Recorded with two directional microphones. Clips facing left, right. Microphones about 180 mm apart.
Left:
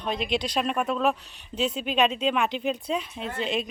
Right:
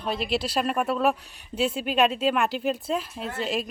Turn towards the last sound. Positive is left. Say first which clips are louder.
# even
turn(degrees=-5)  # may be behind; listen again after turning